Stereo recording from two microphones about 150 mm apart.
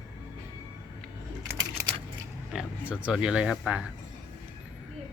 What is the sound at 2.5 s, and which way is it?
Speech, 5° right (ahead or behind).